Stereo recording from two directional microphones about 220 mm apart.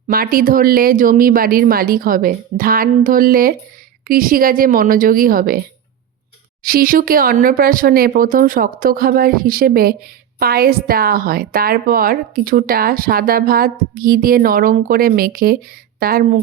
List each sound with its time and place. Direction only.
0.1 s a woman's voice: 40° right (ahead or behind)